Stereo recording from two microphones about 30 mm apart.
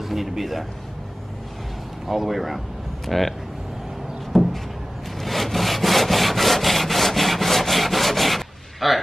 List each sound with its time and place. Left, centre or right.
0.0 s a man's voice: centre
2.0 s speech: centre
4.3 s a sound: centre
5.2 s sawing: centre